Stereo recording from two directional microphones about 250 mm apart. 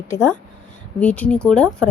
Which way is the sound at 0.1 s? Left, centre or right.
Centre.